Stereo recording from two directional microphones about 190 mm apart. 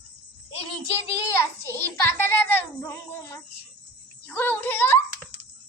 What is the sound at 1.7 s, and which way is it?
A child's voice, 10° left (ahead or behind).